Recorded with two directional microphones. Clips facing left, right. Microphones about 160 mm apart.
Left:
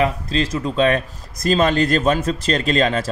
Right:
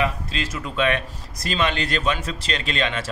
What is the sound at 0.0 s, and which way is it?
A man's voice, 35° left (ahead or behind).